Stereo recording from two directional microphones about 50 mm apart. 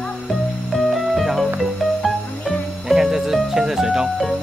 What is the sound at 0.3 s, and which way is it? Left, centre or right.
Music, centre.